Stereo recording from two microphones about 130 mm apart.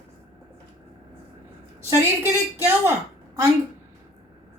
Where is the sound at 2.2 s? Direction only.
20° right (ahead or behind).